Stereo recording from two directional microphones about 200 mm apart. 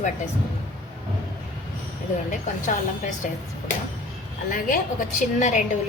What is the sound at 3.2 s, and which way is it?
Speech, 40° left (ahead or behind).